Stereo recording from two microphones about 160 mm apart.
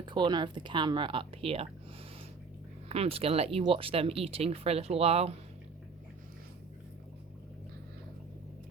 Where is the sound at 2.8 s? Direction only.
40° right (ahead or behind).